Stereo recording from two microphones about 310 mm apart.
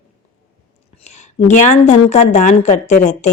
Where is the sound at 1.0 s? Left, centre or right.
Left.